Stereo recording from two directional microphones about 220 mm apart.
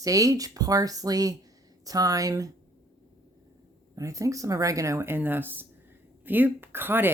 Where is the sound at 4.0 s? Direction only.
15° right (ahead or behind).